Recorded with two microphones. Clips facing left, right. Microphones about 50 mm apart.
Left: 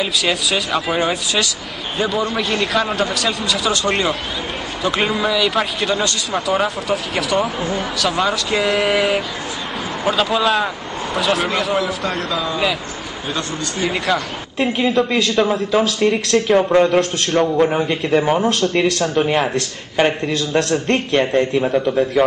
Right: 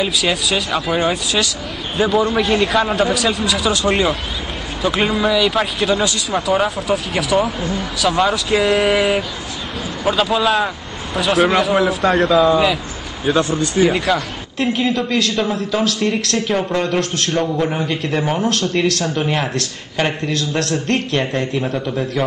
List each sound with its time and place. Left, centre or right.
0.0 s speech: centre
12.0 s speech: centre
13.7 s a man's voice: centre
16.3 s speech: centre
16.6 s a man's voice: centre